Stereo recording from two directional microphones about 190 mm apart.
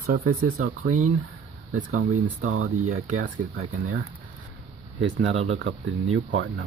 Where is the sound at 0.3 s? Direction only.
90° right.